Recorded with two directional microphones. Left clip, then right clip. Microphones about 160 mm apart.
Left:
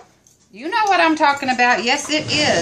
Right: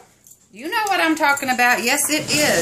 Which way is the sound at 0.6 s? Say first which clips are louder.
Left 4 dB; 35° right (ahead or behind).